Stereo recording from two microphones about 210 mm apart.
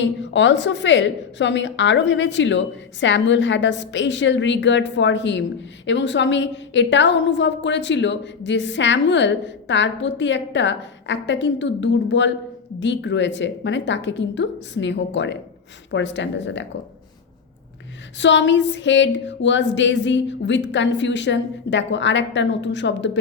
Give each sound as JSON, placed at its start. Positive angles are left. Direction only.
{"t": 0.0, "sound": "a woman's voice", "side_deg": 60}
{"t": 18.2, "sound": "a woman's voice", "side_deg": 60}